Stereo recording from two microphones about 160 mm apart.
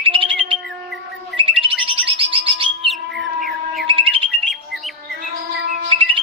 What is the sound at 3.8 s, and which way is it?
Music, 35° right (ahead or behind).